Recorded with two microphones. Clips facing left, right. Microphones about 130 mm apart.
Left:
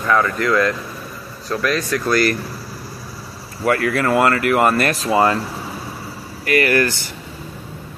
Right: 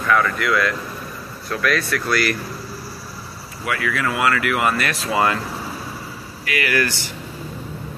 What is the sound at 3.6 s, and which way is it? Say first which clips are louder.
Speech: left 6 dB; 45° left (ahead or behind).